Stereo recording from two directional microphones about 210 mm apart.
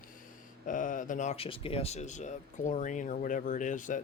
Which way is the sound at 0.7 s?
40° left (ahead or behind).